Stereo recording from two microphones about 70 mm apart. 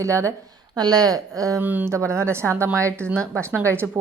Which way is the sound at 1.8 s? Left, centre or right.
Right.